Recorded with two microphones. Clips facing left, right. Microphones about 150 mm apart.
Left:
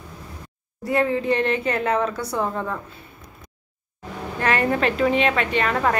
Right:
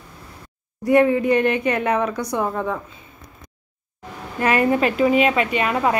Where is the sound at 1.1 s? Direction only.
30° left (ahead or behind).